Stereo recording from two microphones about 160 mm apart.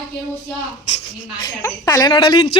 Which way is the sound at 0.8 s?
40° left (ahead or behind).